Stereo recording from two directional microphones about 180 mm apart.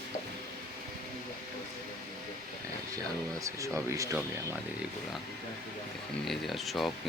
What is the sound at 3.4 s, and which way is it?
Speech, 15° right (ahead or behind).